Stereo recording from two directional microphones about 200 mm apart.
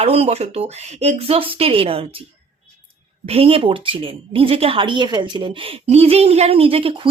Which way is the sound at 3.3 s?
30° right (ahead or behind).